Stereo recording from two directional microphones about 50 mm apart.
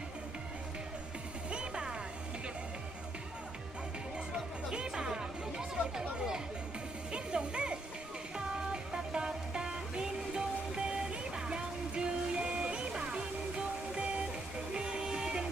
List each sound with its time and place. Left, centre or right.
1.5 s music: centre
4.7 s music: centre